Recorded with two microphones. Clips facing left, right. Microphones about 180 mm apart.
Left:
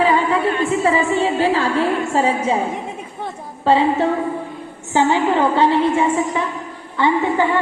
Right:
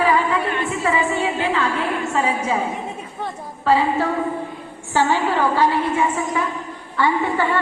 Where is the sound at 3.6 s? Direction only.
25° left (ahead or behind).